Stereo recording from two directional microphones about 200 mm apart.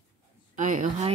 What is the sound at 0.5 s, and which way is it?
Speech, 40° right (ahead or behind).